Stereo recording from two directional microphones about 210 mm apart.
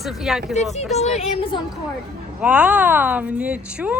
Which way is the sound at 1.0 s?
25° left (ahead or behind).